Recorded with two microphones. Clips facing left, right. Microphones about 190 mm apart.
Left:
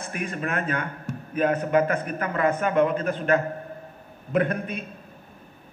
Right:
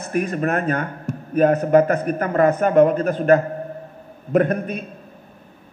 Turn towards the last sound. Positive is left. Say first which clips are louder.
# right 6 dB
turn(degrees=-45)  # may be behind; listen again after turning